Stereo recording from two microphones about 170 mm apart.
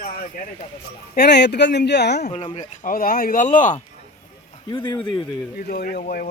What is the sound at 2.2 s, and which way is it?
Speech, 35° left (ahead or behind).